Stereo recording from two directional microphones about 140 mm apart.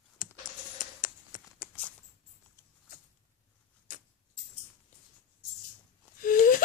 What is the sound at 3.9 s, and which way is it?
Vehicle, 75° left (ahead or behind).